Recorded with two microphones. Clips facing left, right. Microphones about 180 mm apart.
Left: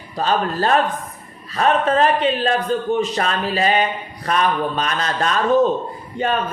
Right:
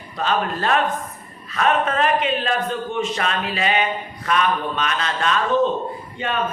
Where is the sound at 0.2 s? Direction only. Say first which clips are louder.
Left 3 dB; 35° left (ahead or behind).